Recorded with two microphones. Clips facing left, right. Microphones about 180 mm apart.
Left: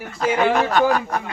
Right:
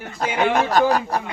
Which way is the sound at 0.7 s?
40° right (ahead or behind).